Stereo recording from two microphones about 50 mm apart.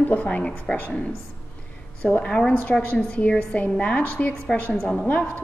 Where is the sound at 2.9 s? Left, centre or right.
Left.